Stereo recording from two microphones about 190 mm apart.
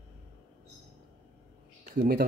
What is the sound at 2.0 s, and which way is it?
Speech, 55° right (ahead or behind).